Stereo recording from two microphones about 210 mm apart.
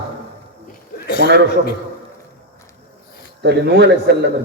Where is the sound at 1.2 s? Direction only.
50° right (ahead or behind).